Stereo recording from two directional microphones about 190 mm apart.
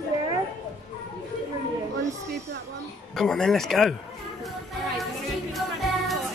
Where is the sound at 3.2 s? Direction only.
Centre (ahead or behind).